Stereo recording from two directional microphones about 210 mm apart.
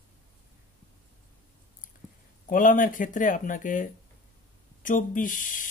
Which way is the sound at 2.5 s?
40° left (ahead or behind).